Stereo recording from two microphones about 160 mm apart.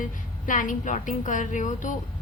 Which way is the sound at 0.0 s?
55° left (ahead or behind).